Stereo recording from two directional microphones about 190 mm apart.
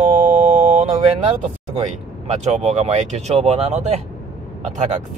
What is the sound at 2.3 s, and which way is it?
Speech, 35° right (ahead or behind).